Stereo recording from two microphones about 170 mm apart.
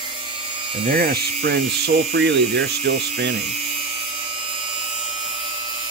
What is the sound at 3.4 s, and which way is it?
Speech, 40° right (ahead or behind).